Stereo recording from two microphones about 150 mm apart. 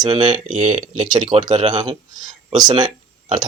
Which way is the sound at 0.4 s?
60° right (ahead or behind).